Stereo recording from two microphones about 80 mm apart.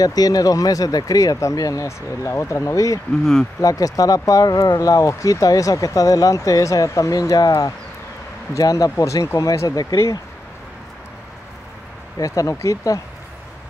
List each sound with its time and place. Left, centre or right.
0.0 s speech: left
12.2 s speech: left